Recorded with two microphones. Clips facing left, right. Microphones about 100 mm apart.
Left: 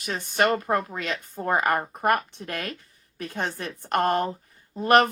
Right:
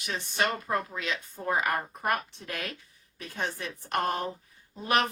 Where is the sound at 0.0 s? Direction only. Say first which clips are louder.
Left 6 dB; 45° left (ahead or behind).